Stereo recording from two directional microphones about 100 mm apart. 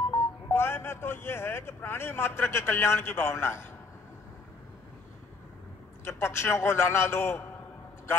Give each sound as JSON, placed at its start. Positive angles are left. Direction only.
{"t": 0.1, "sound": "speech", "side_deg": 25}
{"t": 6.0, "sound": "a man's voice", "side_deg": 25}